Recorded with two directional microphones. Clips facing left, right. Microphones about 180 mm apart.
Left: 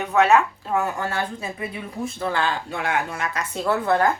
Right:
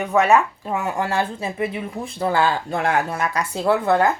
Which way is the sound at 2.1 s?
35° right (ahead or behind).